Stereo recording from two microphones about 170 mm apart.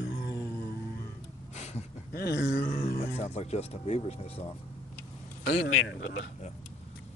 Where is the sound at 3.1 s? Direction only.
40° left (ahead or behind).